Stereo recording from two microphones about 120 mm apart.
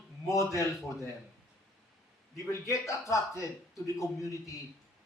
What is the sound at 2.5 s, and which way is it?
A man's voice, 25° left (ahead or behind).